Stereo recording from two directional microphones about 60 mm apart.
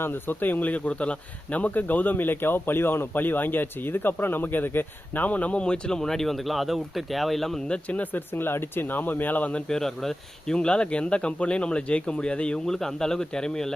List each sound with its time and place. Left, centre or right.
0.0 s speech: left; by 7.6 s centre
7.7 s speech: left
9.6 s speech: centre